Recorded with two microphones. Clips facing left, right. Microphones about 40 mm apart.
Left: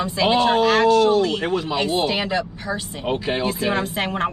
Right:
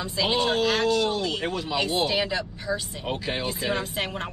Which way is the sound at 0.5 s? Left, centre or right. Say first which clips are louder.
Left 7 dB; centre.